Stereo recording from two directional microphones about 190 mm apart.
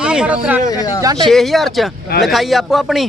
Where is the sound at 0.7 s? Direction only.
20° left (ahead or behind).